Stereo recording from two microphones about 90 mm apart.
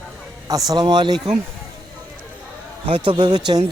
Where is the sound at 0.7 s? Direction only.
55° right (ahead or behind).